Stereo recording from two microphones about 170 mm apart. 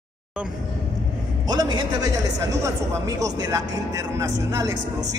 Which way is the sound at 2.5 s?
20° right (ahead or behind).